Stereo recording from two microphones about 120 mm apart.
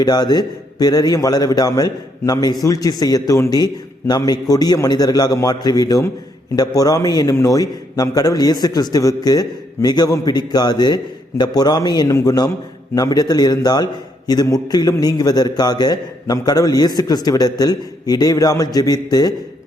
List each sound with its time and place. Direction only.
0.0 s a man's voice: 35° left (ahead or behind)